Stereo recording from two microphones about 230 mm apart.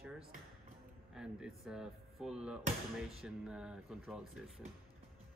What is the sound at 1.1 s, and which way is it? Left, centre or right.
Speech, centre.